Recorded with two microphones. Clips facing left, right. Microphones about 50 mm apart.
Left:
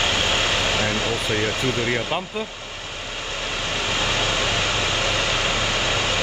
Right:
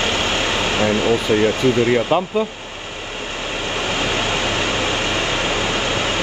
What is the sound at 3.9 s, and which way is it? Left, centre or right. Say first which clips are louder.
Vehicle: right 2 dB; right.